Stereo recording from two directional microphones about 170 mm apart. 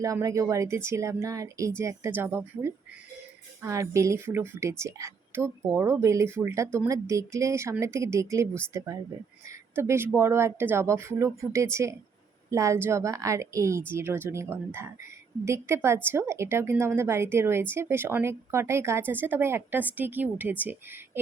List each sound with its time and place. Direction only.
0.0 s a woman's voice: 20° right (ahead or behind)
9.7 s a woman's voice: 15° right (ahead or behind)